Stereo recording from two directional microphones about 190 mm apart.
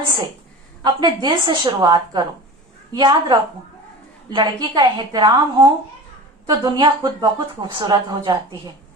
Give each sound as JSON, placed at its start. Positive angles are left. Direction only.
{"t": 0.8, "sound": "a woman's voice", "side_deg": -25}